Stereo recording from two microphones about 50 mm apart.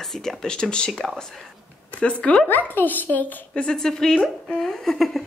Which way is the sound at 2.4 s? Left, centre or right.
Left.